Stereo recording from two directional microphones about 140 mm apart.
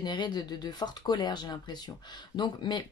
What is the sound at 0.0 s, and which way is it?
Speech, 30° left (ahead or behind).